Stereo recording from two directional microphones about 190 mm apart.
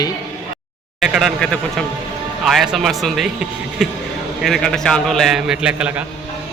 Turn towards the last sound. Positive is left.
turn(degrees=-5)  # may be behind; listen again after turning